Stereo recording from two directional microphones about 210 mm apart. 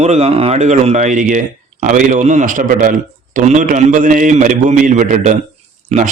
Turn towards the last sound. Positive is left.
turn(degrees=-35)  # may be behind; listen again after turning